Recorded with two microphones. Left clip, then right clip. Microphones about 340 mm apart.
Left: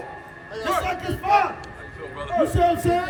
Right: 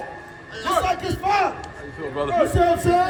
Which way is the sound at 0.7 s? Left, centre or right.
Centre.